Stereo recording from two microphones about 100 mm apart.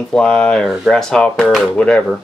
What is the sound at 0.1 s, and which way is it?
Speech, 10° left (ahead or behind).